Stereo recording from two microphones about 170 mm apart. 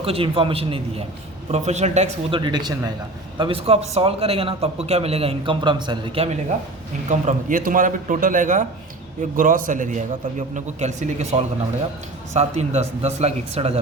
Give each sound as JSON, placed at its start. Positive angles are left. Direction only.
{"t": 0.0, "sound": "a man's voice", "side_deg": -35}
{"t": 2.4, "sound": "a man's voice", "side_deg": -25}
{"t": 7.1, "sound": "a man's voice", "side_deg": -50}